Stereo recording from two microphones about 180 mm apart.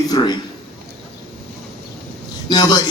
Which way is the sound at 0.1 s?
25° left (ahead or behind).